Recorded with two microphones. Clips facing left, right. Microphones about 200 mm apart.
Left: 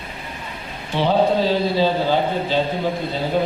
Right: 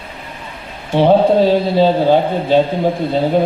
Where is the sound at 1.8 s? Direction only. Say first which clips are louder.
Right 9 dB; 55° right (ahead or behind).